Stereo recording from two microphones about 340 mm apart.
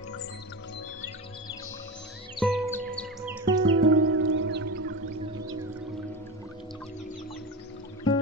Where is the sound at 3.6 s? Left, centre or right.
Right.